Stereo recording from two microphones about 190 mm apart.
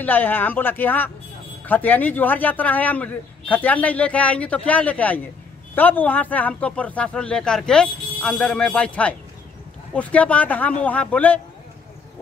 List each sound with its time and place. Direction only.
0.0 s a man's voice: 10° left (ahead or behind)